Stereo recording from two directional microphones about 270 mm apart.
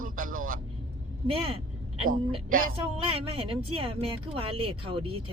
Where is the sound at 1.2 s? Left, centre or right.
Right.